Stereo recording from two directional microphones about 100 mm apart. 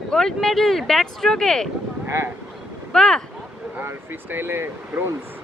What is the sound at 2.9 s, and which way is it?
Speech, 5° left (ahead or behind).